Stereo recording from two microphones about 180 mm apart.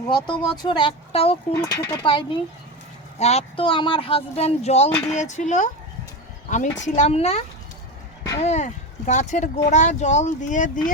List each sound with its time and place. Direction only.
0.1 s speech: 25° left (ahead or behind)
1.5 s speech: 15° left (ahead or behind)
3.2 s speech: 35° left (ahead or behind)